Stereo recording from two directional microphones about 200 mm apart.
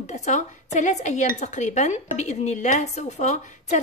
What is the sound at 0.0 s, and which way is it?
A woman's voice, 35° left (ahead or behind).